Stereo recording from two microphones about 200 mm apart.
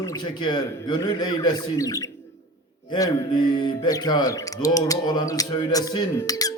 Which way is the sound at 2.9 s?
20° left (ahead or behind).